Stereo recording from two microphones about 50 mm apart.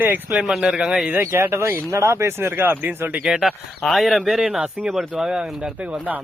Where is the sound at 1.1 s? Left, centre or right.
Right.